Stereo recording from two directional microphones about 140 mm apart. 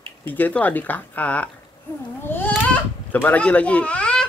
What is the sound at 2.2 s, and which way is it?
Baby cry, 15° left (ahead or behind).